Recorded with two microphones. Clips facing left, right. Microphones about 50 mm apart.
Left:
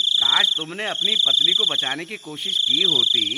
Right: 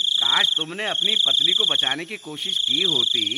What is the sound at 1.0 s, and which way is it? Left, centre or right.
Speech, centre.